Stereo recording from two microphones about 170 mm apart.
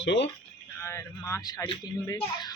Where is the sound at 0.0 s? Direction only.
90° left.